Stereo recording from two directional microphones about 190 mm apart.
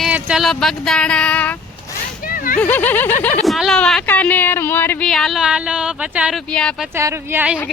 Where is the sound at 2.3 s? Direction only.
50° left (ahead or behind).